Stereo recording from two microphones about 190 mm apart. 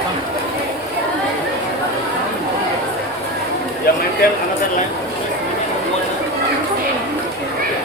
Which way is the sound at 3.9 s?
55° left (ahead or behind).